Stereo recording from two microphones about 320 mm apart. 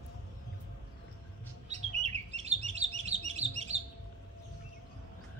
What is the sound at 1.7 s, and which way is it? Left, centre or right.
Chirp, centre.